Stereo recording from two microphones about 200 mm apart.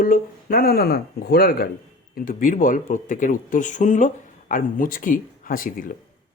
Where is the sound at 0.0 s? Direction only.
45° left (ahead or behind).